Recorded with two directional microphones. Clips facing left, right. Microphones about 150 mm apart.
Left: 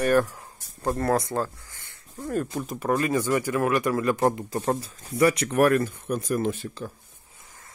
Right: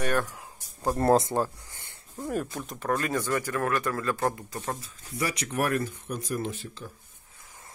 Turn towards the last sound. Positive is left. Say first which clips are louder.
# left 6 dB
turn(degrees=55)  # may be behind; listen again after turning